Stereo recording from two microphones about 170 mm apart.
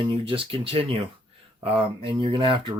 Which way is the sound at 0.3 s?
30° right (ahead or behind).